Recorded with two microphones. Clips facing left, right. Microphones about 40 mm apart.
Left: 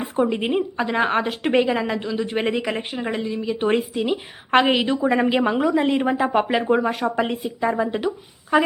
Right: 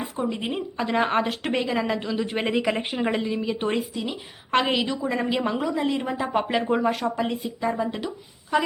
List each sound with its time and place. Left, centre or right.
0.2 s a woman's voice: left
0.9 s a woman's voice: centre
1.8 s speech: centre
3.7 s a woman's voice: left
6.3 s a woman's voice: centre
7.2 s a woman's voice: left